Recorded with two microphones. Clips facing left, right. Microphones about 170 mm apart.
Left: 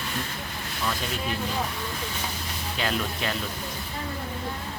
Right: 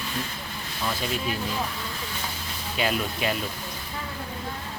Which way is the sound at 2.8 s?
10° right (ahead or behind).